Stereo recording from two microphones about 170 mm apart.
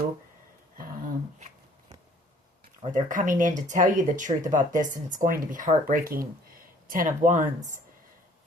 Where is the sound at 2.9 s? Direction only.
50° right (ahead or behind).